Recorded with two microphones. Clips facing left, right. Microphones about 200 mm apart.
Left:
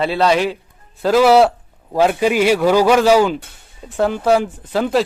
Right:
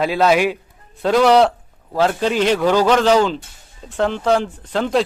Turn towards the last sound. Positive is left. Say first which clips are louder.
# left 1 dB
turn(degrees=10)  # may be behind; listen again after turning